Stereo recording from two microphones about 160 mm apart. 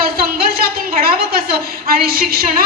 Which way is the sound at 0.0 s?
70° right (ahead or behind).